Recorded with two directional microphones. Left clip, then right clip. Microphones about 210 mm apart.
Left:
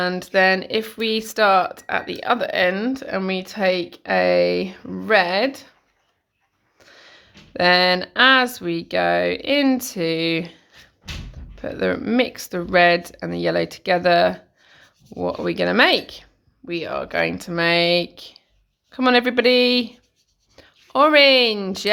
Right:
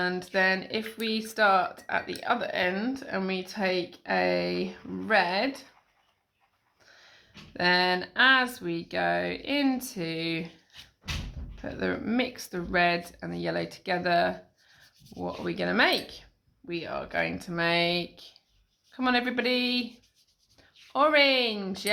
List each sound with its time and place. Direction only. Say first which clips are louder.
0.0 s speech: left 8 dB; 45° left (ahead or behind)
6.7 s speech: left 9 dB; 50° left (ahead or behind)
11.6 s speech: left 9 dB; 50° left (ahead or behind)
20.6 s writing: left 12 dB; 45° left (ahead or behind)
20.9 s speech: left 9 dB; 50° left (ahead or behind)